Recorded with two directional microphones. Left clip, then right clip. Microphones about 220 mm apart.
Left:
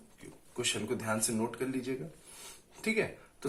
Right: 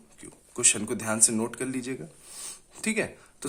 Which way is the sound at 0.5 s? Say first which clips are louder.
Right 6 dB; 45° right (ahead or behind).